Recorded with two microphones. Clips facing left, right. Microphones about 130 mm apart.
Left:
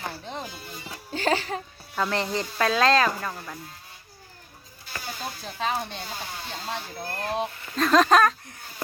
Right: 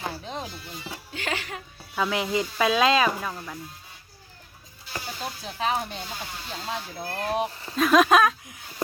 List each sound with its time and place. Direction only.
0.0 s music: 5° right (ahead or behind)
1.1 s music: 35° left (ahead or behind)
2.0 s speech: 5° right (ahead or behind)
5.5 s speech: 5° right (ahead or behind)
7.4 s speech: 35° right (ahead or behind)
7.8 s speech: 5° right (ahead or behind)